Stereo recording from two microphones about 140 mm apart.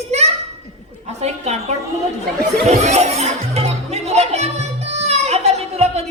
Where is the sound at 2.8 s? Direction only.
55° right (ahead or behind).